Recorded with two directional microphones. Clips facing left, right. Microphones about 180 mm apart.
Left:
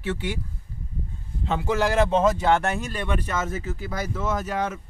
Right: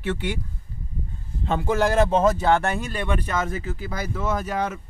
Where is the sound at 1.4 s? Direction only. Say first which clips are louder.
Right 2 dB; 50° right (ahead or behind).